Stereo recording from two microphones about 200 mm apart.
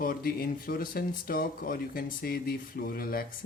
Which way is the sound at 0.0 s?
45° left (ahead or behind).